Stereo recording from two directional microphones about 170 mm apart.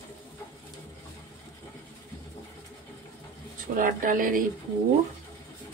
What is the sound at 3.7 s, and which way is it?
Speech, 50° right (ahead or behind).